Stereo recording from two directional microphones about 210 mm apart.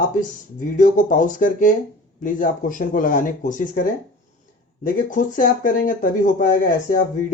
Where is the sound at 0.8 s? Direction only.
40° left (ahead or behind).